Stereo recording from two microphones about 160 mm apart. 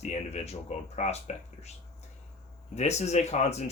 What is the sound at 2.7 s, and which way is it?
Speech, 45° left (ahead or behind).